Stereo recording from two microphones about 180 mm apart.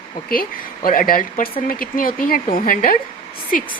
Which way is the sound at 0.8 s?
50° left (ahead or behind).